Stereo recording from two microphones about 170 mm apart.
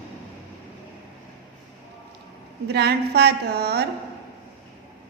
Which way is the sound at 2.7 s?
75° right (ahead or behind).